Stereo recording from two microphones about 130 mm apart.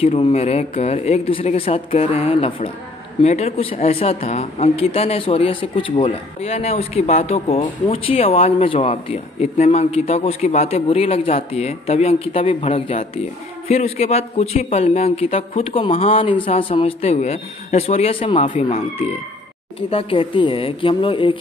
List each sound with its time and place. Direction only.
0.0 s speech: 50° left (ahead or behind)